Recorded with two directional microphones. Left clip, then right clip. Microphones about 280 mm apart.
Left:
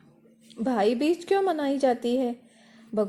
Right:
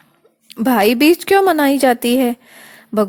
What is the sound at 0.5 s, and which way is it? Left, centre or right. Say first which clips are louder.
A woman's voice: right 11 dB; right.